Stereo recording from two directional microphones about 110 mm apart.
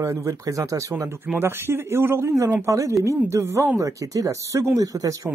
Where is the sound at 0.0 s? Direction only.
30° right (ahead or behind).